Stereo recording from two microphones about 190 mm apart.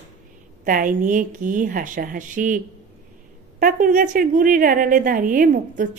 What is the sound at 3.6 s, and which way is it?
Speech, 45° right (ahead or behind).